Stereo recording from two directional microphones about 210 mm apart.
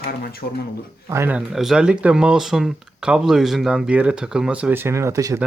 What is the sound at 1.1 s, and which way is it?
Speech, 10° right (ahead or behind).